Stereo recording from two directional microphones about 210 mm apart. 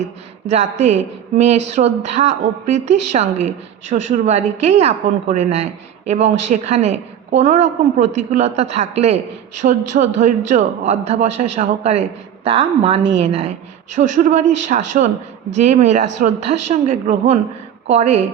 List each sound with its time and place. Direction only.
0.4 s a woman's voice: 30° right (ahead or behind)